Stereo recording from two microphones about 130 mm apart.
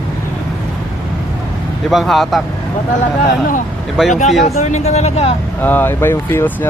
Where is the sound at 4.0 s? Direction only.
5° right (ahead or behind).